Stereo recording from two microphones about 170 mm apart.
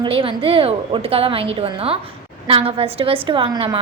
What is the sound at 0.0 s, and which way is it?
A woman's voice, 30° right (ahead or behind).